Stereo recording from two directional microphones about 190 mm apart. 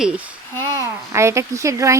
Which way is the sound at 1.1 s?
15° right (ahead or behind).